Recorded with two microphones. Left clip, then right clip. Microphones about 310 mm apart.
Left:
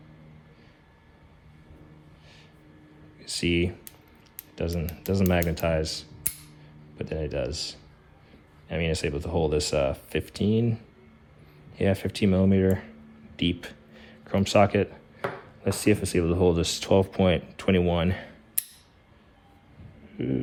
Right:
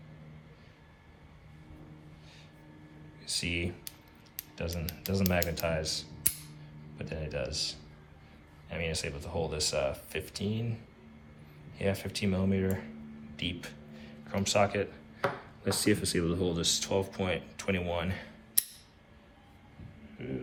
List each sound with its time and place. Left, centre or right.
3.2 s speech: left
13.3 s a sound: left
15.6 s speech: left